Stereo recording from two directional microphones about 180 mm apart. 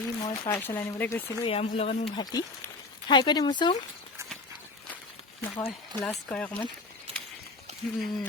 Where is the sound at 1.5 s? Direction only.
35° left (ahead or behind).